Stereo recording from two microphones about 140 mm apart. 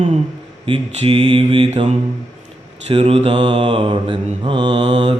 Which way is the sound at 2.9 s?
40° right (ahead or behind).